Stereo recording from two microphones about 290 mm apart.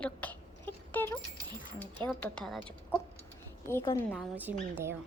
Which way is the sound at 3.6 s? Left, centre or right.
Centre.